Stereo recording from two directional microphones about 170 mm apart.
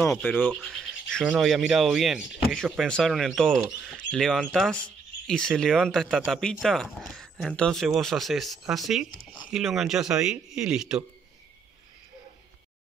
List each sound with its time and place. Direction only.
0.0 s frog: 5° left (ahead or behind)
1.2 s speech: 5° right (ahead or behind)